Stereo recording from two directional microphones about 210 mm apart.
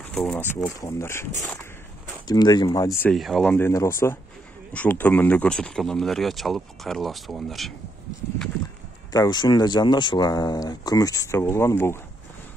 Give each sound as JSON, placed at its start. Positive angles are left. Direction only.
{"t": 0.1, "sound": "speech", "side_deg": 5}
{"t": 3.1, "sound": "speech", "side_deg": 0}
{"t": 9.1, "sound": "speech", "side_deg": 20}